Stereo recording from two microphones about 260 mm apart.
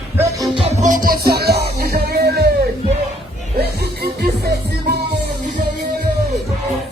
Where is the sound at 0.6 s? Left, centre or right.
Right.